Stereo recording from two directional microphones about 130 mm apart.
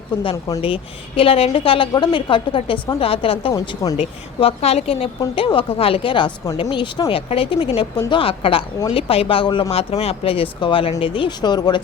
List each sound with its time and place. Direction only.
0.2 s a woman's voice: 40° left (ahead or behind)